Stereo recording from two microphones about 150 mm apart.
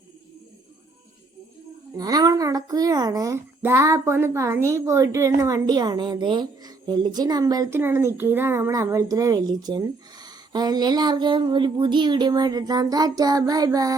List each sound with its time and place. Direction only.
2.0 s a woman's voice: 25° right (ahead or behind)